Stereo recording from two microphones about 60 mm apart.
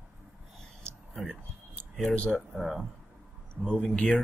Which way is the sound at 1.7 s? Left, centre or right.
Centre.